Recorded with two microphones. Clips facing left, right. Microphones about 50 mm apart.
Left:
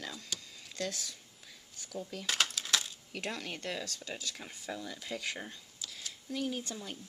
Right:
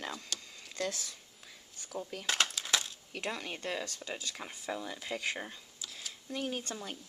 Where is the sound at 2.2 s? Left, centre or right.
Centre.